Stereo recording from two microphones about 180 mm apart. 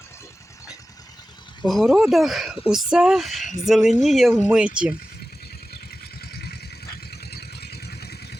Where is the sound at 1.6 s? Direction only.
Centre (ahead or behind).